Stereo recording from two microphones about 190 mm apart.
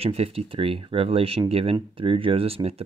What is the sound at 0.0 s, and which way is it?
Speech, 30° right (ahead or behind).